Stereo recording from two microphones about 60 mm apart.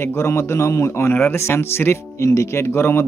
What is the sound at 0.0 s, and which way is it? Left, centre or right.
Speech, left.